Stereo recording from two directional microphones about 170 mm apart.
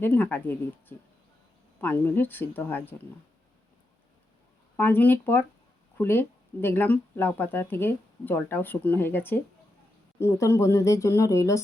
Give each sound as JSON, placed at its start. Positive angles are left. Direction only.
{"t": 0.0, "sound": "speech", "side_deg": 10}
{"t": 4.8, "sound": "speech", "side_deg": 10}